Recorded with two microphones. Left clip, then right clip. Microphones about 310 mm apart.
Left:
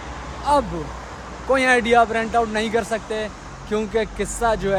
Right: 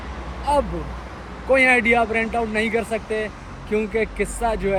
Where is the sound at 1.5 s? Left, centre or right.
Centre.